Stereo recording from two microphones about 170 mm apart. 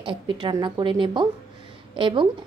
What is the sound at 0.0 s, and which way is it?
A woman's voice, 25° right (ahead or behind).